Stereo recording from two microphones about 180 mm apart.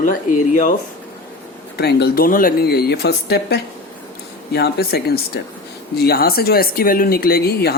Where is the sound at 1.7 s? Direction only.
65° left (ahead or behind).